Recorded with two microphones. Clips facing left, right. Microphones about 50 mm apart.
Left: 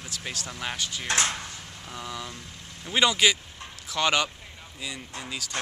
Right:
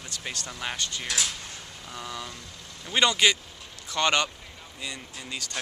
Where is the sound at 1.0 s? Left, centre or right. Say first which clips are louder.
Left 7 dB; left.